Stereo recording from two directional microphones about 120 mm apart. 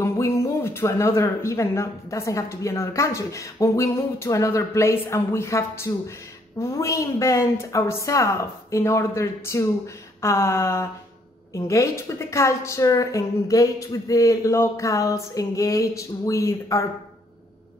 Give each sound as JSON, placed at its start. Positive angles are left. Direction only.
{"t": 0.0, "sound": "speech", "side_deg": 25}